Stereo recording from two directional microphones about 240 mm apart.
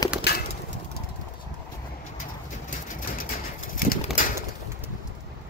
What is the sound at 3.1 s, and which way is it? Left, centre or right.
Bird, left.